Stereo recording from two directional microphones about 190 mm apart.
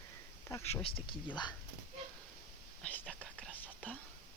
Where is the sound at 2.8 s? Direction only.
5° left (ahead or behind).